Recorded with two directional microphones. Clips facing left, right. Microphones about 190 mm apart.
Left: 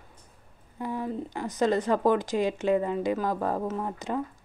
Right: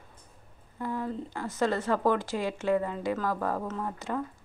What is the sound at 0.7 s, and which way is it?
Speech, 15° left (ahead or behind).